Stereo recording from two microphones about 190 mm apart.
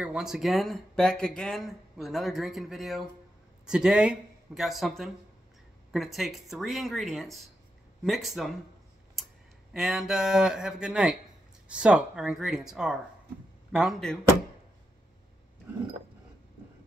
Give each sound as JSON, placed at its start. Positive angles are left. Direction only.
{"t": 0.0, "sound": "speech", "side_deg": -5}
{"t": 9.2, "sound": "tick-tock", "side_deg": 0}
{"t": 9.8, "sound": "speech", "side_deg": 0}